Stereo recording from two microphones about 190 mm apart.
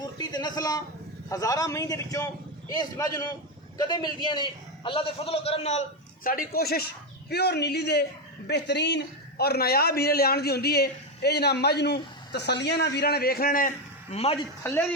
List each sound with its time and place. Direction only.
0.0 s a sound: 20° left (ahead or behind)
1.3 s a man's voice: 20° left (ahead or behind); by 5.8 s 35° left (ahead or behind)
6.2 s a man's voice: 50° left (ahead or behind)
14.6 s speech: 10° left (ahead or behind)